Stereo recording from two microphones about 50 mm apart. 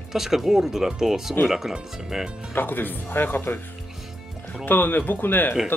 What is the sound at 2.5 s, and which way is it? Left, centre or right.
Speech, left.